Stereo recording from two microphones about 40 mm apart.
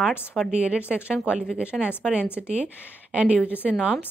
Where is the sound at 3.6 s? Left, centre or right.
Centre.